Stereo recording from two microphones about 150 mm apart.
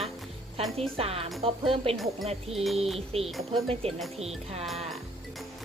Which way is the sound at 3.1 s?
40° right (ahead or behind).